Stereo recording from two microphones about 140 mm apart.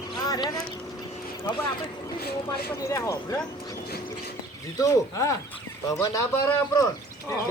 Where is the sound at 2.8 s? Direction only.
20° left (ahead or behind).